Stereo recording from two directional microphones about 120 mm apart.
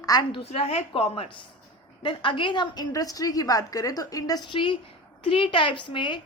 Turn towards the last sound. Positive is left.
turn(degrees=40)  # may be behind; listen again after turning